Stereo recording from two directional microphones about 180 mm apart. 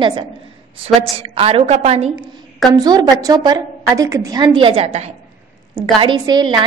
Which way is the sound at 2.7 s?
20° right (ahead or behind).